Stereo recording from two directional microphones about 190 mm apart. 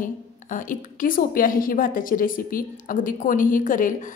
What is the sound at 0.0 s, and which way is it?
A woman's voice, 45° left (ahead or behind).